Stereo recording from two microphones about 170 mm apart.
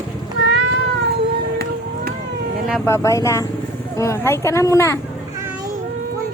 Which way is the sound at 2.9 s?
15° left (ahead or behind).